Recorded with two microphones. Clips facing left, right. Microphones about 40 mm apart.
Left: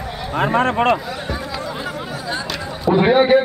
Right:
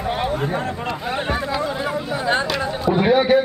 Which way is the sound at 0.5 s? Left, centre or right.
Left.